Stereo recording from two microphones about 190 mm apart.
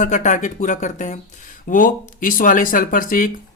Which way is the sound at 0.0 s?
40° left (ahead or behind).